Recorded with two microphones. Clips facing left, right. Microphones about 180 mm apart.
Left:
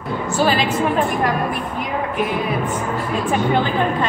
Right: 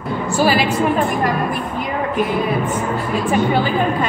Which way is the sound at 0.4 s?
10° right (ahead or behind).